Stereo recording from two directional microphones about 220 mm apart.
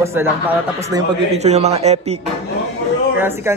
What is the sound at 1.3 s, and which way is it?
Speech, 30° right (ahead or behind).